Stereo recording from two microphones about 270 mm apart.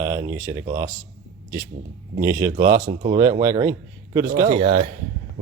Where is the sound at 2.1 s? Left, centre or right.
Centre.